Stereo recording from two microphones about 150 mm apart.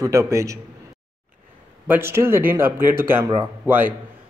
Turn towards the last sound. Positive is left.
turn(degrees=-15)  # may be behind; listen again after turning